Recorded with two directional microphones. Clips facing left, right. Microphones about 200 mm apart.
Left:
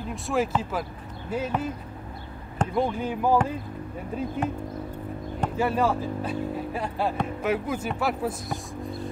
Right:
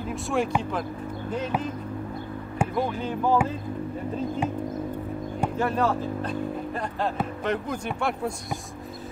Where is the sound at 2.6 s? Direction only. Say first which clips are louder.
Right 1 dB; 10° right (ahead or behind).